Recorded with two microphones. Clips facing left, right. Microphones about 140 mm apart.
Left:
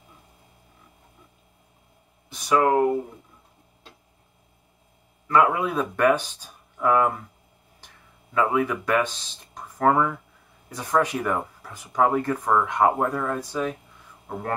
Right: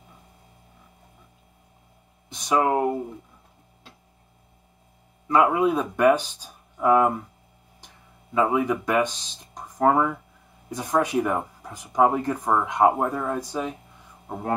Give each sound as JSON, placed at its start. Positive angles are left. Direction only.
{"t": 2.2, "sound": "a sound", "side_deg": -20}
{"t": 5.3, "sound": "speech", "side_deg": -15}
{"t": 8.4, "sound": "speech", "side_deg": -15}